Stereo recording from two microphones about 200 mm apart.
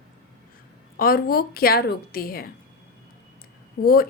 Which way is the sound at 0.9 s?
45° left (ahead or behind).